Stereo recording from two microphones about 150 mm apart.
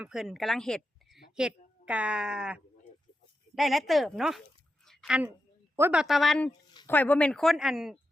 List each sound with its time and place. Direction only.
0.0 s a woman's voice: 5° right (ahead or behind)
4.9 s a sound: centre (ahead or behind)
5.7 s a woman's voice: 15° right (ahead or behind)
6.0 s speech: centre (ahead or behind)